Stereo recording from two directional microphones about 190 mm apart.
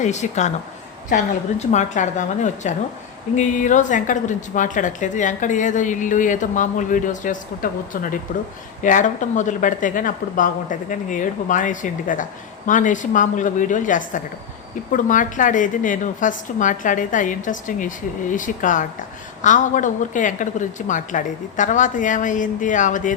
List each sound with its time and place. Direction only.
0.0 s a woman's voice: 40° left (ahead or behind)